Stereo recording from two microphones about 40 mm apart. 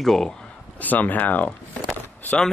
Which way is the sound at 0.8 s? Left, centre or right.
Left.